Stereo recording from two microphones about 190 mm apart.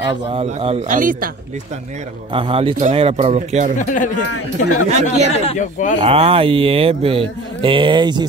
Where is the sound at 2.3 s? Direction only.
30° right (ahead or behind).